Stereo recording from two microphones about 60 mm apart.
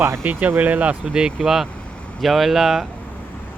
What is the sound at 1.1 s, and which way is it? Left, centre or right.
Speech, centre.